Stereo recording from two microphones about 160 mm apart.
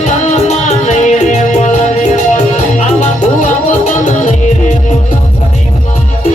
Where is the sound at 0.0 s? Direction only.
50° left (ahead or behind).